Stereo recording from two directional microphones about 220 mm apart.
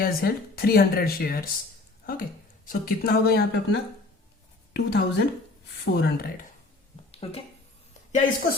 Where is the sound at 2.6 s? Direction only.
40° left (ahead or behind).